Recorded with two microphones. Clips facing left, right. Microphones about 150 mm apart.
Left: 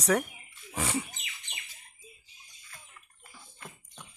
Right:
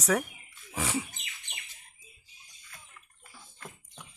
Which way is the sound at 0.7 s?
Centre (ahead or behind).